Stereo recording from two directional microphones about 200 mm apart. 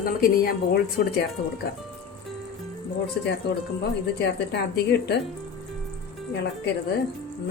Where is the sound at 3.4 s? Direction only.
55° left (ahead or behind).